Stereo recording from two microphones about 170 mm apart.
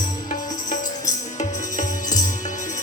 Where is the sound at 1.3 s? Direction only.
45° left (ahead or behind).